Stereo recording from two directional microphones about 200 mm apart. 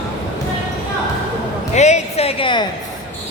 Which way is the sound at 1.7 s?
35° left (ahead or behind).